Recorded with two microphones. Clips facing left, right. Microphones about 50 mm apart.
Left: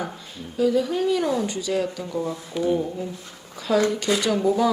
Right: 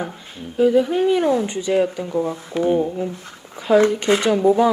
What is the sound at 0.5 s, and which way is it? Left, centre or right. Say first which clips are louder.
Speech: right 5 dB; right.